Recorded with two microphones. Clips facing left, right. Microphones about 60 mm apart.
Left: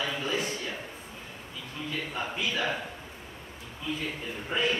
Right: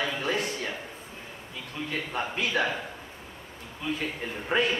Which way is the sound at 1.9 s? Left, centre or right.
Right.